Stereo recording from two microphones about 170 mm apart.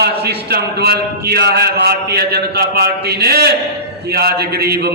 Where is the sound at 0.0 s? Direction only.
70° right (ahead or behind).